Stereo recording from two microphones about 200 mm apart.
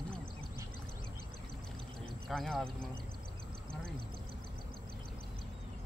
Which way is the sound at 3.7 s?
50° right (ahead or behind).